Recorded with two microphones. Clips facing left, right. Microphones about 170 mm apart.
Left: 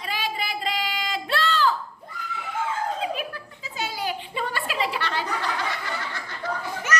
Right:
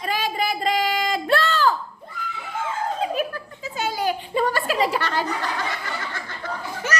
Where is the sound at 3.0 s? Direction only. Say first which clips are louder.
Right 5 dB; 45° right (ahead or behind).